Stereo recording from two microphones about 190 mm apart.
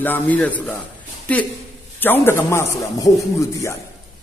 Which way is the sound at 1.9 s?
10° left (ahead or behind).